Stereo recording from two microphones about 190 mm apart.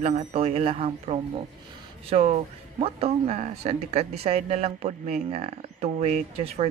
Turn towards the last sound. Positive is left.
turn(degrees=-35)  # may be behind; listen again after turning